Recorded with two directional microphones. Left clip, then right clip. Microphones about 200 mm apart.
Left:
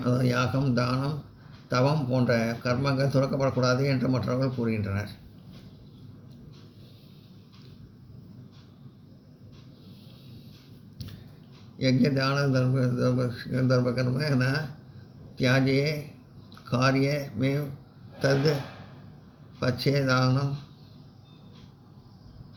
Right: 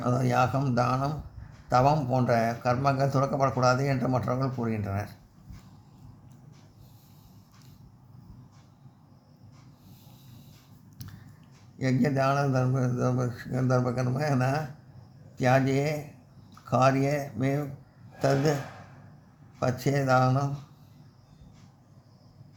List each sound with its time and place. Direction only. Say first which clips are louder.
0.0 s a man's voice: right 2 dB; 35° right (ahead or behind)
11.8 s a man's voice: left 1 dB; 40° right (ahead or behind)
15.4 s a man's voice: even; 40° right (ahead or behind)
19.5 s a man's voice: left 1 dB; 40° right (ahead or behind)